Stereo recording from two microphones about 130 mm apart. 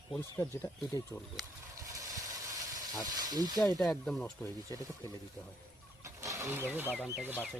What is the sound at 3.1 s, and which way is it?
Speech, 30° right (ahead or behind).